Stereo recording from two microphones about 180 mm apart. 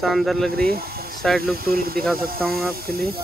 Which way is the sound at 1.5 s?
55° right (ahead or behind).